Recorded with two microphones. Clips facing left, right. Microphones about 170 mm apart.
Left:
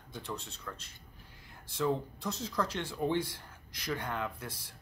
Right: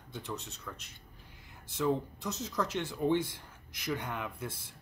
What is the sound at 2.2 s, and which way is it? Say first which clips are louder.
Speech: even; 20° right (ahead or behind).